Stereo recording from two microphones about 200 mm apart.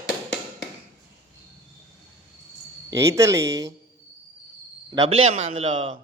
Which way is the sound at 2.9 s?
15° right (ahead or behind).